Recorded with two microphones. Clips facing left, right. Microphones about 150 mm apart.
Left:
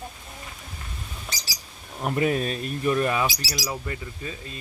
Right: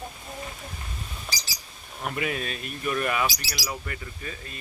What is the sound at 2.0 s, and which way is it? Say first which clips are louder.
Speech: left 6 dB; 35° left (ahead or behind).